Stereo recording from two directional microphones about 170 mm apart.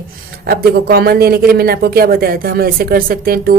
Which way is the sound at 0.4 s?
65° right (ahead or behind).